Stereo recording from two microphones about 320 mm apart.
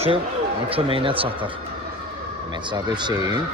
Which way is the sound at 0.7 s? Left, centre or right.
Centre.